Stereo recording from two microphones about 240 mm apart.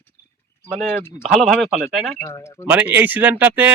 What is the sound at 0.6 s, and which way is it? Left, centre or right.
Speech, centre.